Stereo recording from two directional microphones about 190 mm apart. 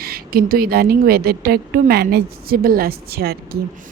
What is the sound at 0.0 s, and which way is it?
A woman's voice, 50° right (ahead or behind).